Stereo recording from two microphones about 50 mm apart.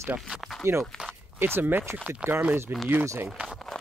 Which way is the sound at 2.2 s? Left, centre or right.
Centre.